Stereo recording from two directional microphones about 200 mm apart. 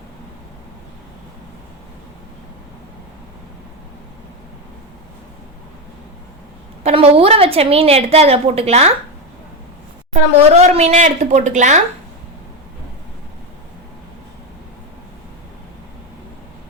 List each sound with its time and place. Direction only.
6.8 s a woman's voice: 30° right (ahead or behind)
10.5 s a woman's voice: 35° right (ahead or behind)